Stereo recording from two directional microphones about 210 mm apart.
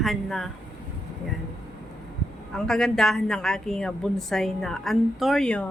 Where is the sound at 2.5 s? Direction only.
5° left (ahead or behind).